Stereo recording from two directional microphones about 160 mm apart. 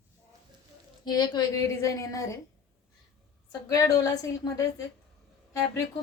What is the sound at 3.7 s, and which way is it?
Speech, 20° left (ahead or behind).